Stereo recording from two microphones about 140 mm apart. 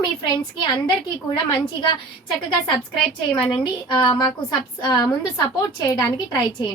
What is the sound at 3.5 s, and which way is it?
A woman's voice, 35° left (ahead or behind).